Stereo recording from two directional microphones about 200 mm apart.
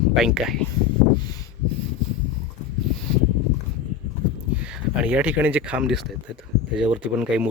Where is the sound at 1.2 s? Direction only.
20° left (ahead or behind).